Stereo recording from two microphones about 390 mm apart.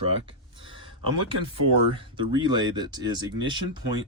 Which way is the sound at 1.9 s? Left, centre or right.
Centre.